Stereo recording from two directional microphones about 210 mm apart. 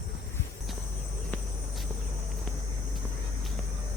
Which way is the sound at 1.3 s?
Centre (ahead or behind).